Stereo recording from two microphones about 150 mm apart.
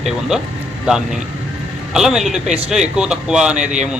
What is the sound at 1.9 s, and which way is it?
A man's voice, 5° right (ahead or behind).